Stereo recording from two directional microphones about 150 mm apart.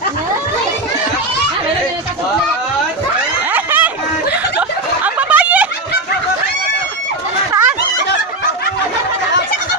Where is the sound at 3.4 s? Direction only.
10° right (ahead or behind).